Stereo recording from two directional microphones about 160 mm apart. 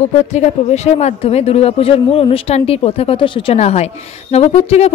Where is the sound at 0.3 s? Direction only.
40° left (ahead or behind).